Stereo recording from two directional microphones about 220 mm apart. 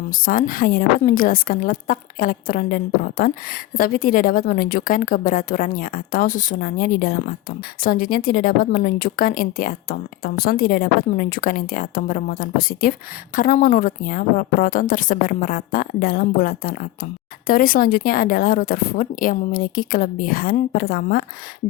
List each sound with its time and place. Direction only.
0.1 s a woman's voice: 40° left (ahead or behind)